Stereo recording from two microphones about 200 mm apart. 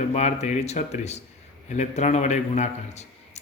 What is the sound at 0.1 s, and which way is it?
A man's voice, 35° left (ahead or behind).